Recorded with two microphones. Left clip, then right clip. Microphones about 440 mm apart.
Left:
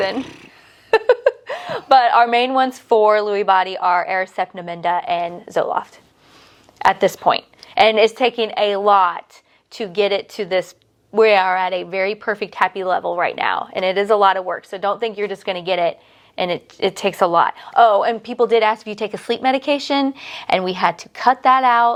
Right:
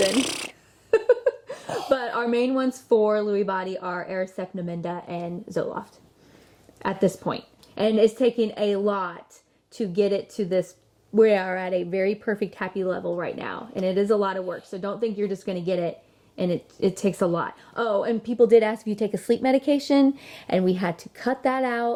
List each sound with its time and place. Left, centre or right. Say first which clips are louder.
1.0 s a woman's voice: left 6 dB; left
7.0 s a woman's voice: left 9 dB; left